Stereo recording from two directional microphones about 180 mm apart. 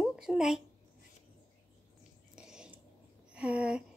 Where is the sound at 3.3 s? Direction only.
5° right (ahead or behind).